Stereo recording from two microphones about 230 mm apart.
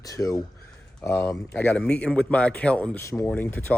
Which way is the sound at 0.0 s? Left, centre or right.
Centre.